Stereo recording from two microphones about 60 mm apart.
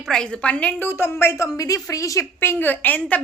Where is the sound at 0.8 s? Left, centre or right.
Left.